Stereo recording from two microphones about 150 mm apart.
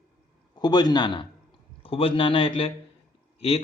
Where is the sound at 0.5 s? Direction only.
30° left (ahead or behind).